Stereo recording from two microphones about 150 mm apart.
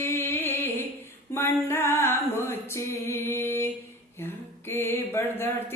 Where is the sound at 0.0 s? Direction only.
15° left (ahead or behind).